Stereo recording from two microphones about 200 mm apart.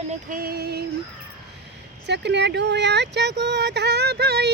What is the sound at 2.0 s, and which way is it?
Speech, 60° right (ahead or behind).